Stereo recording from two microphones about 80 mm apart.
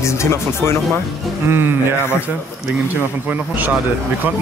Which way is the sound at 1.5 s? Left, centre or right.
Right.